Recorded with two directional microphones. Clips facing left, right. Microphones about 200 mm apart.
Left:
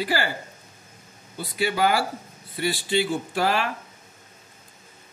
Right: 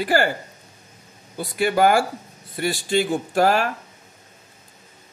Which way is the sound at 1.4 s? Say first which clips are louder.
Right 5 dB; 50° right (ahead or behind).